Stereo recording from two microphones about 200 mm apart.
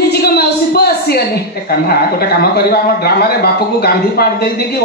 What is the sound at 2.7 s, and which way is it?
A man's voice, 50° left (ahead or behind).